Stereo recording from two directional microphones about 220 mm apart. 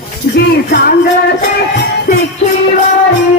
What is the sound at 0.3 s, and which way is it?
Speech, 45° left (ahead or behind).